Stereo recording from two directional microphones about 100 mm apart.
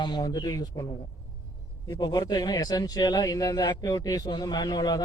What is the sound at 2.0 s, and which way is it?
A man's voice, 45° left (ahead or behind).